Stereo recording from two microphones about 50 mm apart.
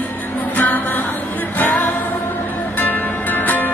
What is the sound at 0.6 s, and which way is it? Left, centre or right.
Music, left.